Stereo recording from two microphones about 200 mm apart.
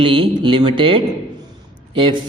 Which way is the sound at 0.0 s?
25° right (ahead or behind).